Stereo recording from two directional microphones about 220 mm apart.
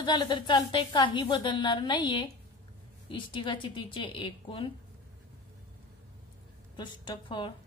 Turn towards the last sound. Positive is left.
turn(degrees=20)  # may be behind; listen again after turning